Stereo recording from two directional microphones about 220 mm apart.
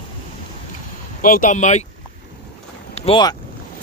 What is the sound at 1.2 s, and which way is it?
Speech, 35° left (ahead or behind).